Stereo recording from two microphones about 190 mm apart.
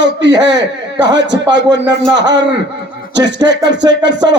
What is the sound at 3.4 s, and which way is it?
Speech, 65° right (ahead or behind).